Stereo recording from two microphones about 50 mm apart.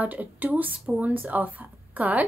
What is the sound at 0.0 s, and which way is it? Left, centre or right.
Speech, right.